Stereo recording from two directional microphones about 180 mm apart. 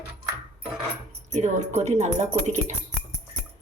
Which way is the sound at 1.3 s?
40° right (ahead or behind).